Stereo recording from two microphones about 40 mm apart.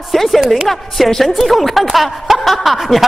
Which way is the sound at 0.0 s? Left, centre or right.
Centre.